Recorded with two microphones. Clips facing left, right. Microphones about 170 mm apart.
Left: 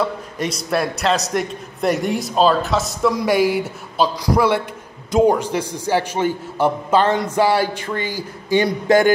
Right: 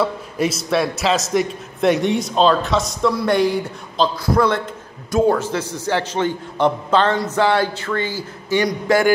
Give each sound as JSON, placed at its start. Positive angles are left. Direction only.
{"t": 0.0, "sound": "a man's voice", "side_deg": -5}